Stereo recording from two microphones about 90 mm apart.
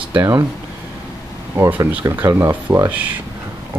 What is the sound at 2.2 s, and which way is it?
Speech, 35° right (ahead or behind).